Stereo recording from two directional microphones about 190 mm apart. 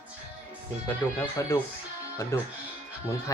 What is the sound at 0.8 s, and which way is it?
Speech, 15° left (ahead or behind).